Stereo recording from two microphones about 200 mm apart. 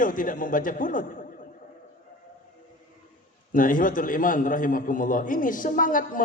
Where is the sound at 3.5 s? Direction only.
45° left (ahead or behind).